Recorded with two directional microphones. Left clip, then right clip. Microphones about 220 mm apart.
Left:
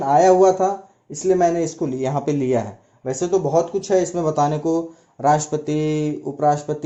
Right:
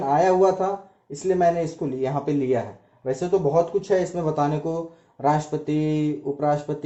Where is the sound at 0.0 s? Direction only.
45° left (ahead or behind).